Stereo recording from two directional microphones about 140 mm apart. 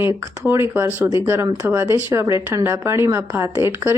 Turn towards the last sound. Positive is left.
turn(degrees=-15)  # may be behind; listen again after turning